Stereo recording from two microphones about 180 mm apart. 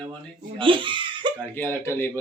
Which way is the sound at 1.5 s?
15° left (ahead or behind).